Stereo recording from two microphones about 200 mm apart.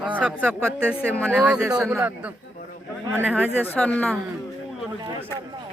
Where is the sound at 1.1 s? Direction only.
5° left (ahead or behind).